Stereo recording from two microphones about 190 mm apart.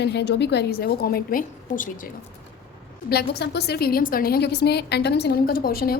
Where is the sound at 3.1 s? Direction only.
60° left (ahead or behind).